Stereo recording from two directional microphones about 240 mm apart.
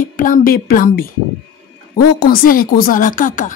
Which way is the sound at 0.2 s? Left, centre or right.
Left.